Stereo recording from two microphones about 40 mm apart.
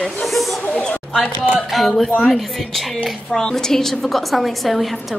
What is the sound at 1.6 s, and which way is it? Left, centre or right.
A woman's voice, centre.